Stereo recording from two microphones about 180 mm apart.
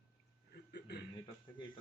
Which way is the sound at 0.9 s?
65° left (ahead or behind).